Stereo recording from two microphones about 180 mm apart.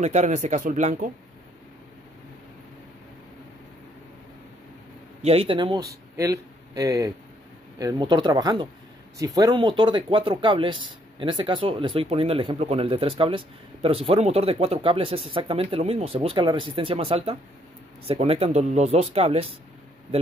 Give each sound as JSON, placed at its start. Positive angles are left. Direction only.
{"t": 0.0, "sound": "speech", "side_deg": -40}
{"t": 5.2, "sound": "speech", "side_deg": -30}